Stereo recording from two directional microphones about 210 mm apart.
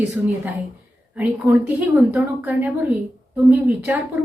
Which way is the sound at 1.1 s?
5° right (ahead or behind).